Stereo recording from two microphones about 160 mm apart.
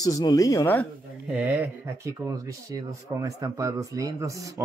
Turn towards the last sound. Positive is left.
turn(degrees=-20)  # may be behind; listen again after turning